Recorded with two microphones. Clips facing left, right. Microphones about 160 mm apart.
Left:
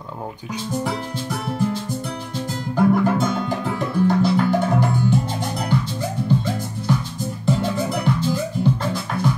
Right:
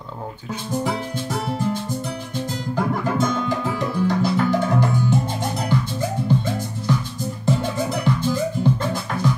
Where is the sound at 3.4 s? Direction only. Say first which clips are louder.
Right 1 dB; 55° left (ahead or behind).